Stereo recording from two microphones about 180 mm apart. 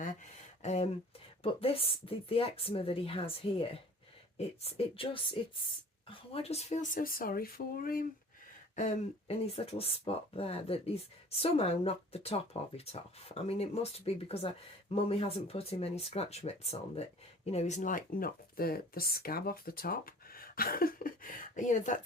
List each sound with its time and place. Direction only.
0.6 s speech: 40° left (ahead or behind)
8.7 s speech: 35° left (ahead or behind)